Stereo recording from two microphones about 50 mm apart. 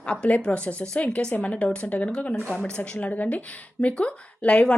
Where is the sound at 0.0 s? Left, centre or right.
Left.